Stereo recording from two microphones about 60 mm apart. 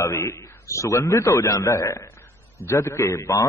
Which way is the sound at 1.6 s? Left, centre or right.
Left.